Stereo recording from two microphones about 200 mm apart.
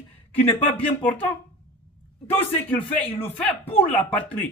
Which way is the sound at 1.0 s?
10° left (ahead or behind).